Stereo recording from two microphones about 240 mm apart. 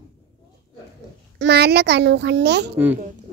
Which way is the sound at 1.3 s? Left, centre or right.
Right.